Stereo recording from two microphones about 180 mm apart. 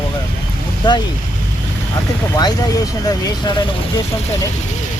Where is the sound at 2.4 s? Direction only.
20° left (ahead or behind).